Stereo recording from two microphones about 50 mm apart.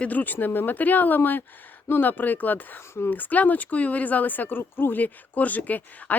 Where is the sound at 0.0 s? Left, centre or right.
Left.